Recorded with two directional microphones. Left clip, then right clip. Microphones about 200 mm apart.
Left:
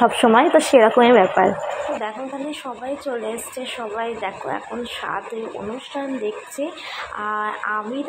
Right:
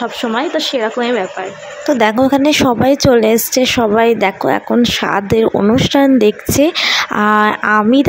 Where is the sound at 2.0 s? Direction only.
60° right (ahead or behind).